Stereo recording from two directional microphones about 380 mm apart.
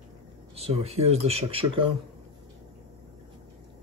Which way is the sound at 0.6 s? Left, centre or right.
Centre.